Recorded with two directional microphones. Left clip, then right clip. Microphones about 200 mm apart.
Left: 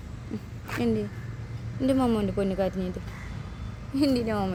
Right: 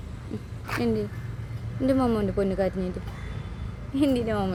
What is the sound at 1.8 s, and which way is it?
Speech, centre (ahead or behind).